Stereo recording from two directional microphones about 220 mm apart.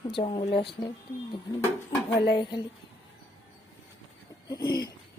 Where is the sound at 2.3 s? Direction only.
20° left (ahead or behind).